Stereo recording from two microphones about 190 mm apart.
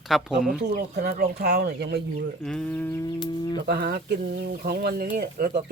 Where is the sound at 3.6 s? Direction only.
55° right (ahead or behind).